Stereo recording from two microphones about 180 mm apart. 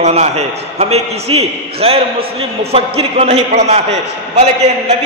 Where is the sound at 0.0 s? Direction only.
35° right (ahead or behind).